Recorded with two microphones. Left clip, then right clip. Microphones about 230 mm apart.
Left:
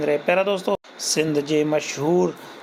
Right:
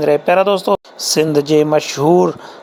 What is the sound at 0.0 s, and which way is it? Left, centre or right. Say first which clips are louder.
Speech: right 8 dB; right.